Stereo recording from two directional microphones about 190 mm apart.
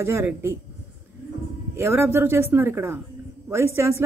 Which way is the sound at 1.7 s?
15° right (ahead or behind).